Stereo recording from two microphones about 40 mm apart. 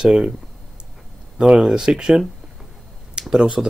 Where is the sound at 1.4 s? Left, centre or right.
Centre.